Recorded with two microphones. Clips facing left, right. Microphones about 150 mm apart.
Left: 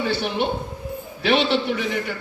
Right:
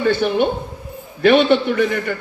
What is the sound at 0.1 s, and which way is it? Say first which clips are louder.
A man's voice: right 6 dB; 50° right (ahead or behind).